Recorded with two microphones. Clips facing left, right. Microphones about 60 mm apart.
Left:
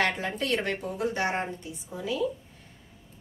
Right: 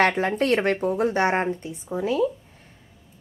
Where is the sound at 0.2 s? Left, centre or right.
Right.